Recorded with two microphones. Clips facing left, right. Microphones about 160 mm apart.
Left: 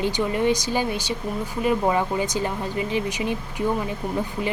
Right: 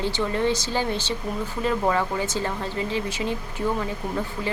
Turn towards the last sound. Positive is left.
turn(degrees=15)  # may be behind; listen again after turning